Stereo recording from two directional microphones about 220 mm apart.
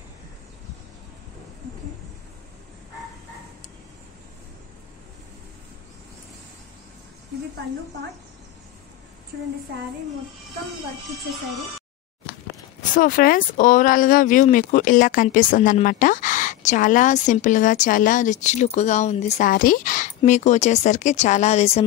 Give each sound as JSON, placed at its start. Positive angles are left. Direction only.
{"t": 12.9, "sound": "speech", "side_deg": 40}